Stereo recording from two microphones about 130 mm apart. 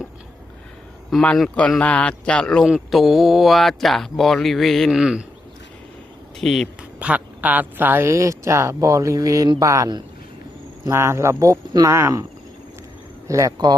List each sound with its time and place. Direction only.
1.1 s speech: 5° left (ahead or behind)
6.4 s speech: centre (ahead or behind); by 12.2 s 25° right (ahead or behind)
13.2 s speech: 25° right (ahead or behind)